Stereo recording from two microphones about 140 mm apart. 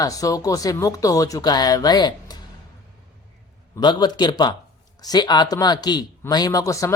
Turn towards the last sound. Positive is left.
turn(degrees=25)  # may be behind; listen again after turning